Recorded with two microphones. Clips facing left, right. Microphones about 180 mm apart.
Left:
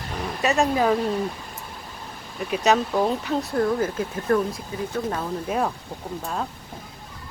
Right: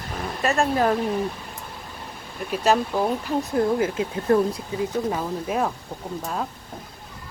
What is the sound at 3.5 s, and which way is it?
Speech, 15° right (ahead or behind).